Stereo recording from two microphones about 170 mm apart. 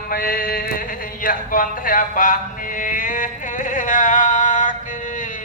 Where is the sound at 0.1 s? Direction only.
60° left (ahead or behind).